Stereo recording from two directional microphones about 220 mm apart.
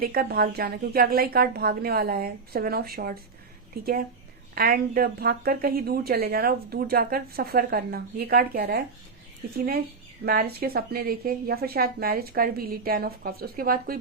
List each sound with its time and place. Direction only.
0.0 s a woman's voice: 45° right (ahead or behind)
4.5 s a woman's voice: 40° right (ahead or behind)
10.2 s a woman's voice: 45° right (ahead or behind)